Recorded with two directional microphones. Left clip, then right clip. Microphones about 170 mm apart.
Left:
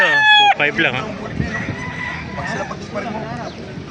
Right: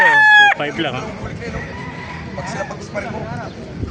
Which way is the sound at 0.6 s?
10° right (ahead or behind).